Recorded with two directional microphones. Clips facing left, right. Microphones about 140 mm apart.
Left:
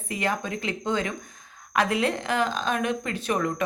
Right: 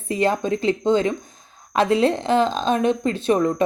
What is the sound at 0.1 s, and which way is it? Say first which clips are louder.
A woman's voice: right 8 dB; 30° right (ahead or behind).